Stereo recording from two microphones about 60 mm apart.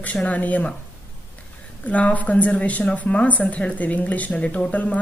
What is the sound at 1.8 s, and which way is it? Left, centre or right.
A woman's voice, left.